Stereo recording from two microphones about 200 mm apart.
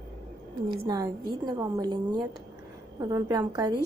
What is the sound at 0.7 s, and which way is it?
A woman's voice, 20° right (ahead or behind).